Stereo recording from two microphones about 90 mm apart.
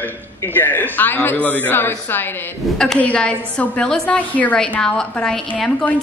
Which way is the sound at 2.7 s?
5° left (ahead or behind).